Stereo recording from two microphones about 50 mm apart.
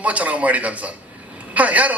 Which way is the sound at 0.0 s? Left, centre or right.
Right.